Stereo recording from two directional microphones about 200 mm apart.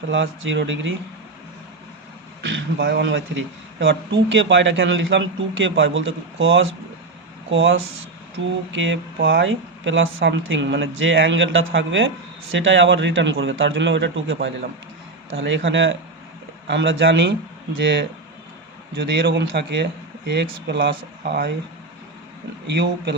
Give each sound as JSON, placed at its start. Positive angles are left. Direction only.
{"t": 0.1, "sound": "a man's voice", "side_deg": -70}
{"t": 2.4, "sound": "a man's voice", "side_deg": -65}
{"t": 14.3, "sound": "a man's voice", "side_deg": -50}
{"t": 15.3, "sound": "a man's voice", "side_deg": -70}
{"t": 22.6, "sound": "speech", "side_deg": -60}